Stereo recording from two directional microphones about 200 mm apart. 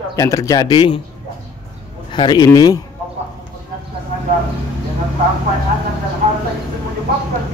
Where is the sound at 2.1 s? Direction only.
20° left (ahead or behind).